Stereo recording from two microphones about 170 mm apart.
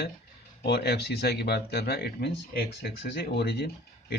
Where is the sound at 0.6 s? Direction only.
75° left (ahead or behind).